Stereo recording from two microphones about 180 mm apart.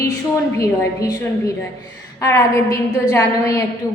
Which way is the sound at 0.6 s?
20° left (ahead or behind).